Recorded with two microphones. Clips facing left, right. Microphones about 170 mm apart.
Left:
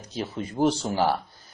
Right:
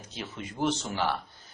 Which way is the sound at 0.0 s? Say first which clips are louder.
Left 7 dB; 40° left (ahead or behind).